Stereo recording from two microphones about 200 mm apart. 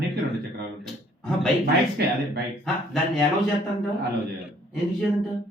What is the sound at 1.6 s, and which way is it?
Speech, 55° right (ahead or behind).